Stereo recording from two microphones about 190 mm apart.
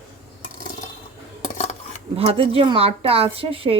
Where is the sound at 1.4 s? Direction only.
40° left (ahead or behind).